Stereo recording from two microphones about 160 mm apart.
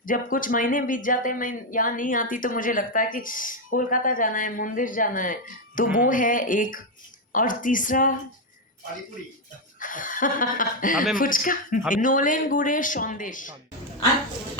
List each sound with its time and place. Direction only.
0.0 s speech: 60° left (ahead or behind)
9.8 s speech: 55° left (ahead or behind)